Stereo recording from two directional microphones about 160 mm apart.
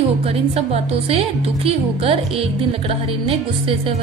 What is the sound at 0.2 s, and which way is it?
Speech, 40° right (ahead or behind).